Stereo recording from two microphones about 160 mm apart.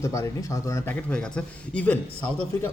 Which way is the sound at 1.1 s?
5° left (ahead or behind).